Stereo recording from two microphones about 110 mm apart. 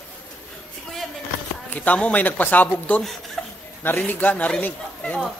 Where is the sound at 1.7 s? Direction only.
15° left (ahead or behind).